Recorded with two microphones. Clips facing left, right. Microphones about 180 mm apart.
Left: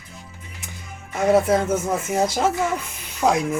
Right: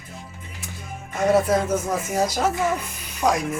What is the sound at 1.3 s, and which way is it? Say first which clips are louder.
Speech: left 2 dB; 20° left (ahead or behind).